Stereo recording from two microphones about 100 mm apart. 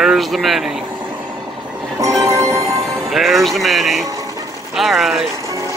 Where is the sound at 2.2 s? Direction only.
30° right (ahead or behind).